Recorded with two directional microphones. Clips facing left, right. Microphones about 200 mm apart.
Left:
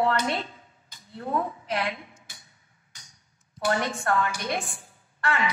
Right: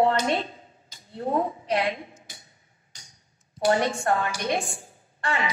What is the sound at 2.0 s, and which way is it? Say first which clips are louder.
Speech: right 5 dB; 50° right (ahead or behind).